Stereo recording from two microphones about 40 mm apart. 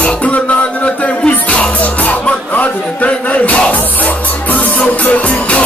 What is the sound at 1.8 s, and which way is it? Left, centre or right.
Music, left.